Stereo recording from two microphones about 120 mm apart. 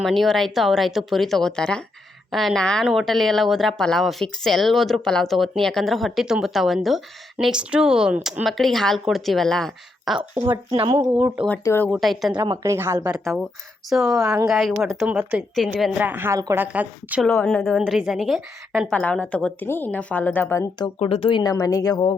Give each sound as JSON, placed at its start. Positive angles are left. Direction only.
{"t": 0.0, "sound": "speech", "side_deg": 0}
{"t": 8.4, "sound": "speech", "side_deg": 0}
{"t": 10.7, "sound": "speech", "side_deg": -50}
{"t": 11.6, "sound": "speech", "side_deg": 20}
{"t": 11.9, "sound": "speech", "side_deg": 0}
{"t": 12.6, "sound": "speech", "side_deg": -25}
{"t": 13.2, "sound": "speech", "side_deg": 0}
{"t": 17.2, "sound": "a woman's voice", "side_deg": 15}
{"t": 17.7, "sound": "a woman's voice", "side_deg": -5}
{"t": 21.0, "sound": "speech", "side_deg": 50}
{"t": 21.5, "sound": "speech", "side_deg": 30}